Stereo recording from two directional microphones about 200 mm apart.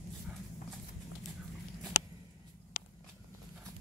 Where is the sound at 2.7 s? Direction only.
45° left (ahead or behind).